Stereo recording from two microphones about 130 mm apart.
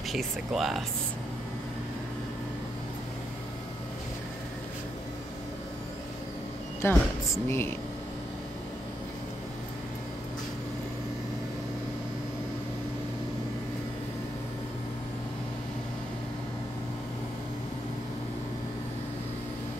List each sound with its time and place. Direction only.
0.1 s speech: centre (ahead or behind)
6.8 s speech: 20° left (ahead or behind)